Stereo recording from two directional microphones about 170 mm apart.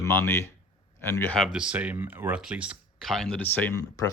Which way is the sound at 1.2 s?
Centre (ahead or behind).